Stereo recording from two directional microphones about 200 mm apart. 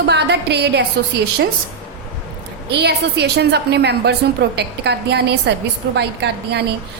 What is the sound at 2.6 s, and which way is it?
A woman's voice, 55° right (ahead or behind).